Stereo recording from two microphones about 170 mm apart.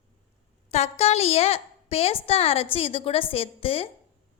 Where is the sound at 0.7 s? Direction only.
40° left (ahead or behind).